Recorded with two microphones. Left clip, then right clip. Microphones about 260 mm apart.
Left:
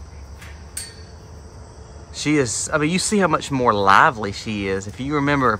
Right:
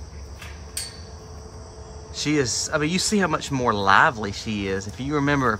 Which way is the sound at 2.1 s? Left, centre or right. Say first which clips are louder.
Left 3 dB; centre.